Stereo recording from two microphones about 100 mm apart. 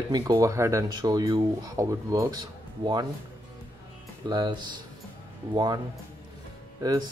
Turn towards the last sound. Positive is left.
turn(degrees=-40)  # may be behind; listen again after turning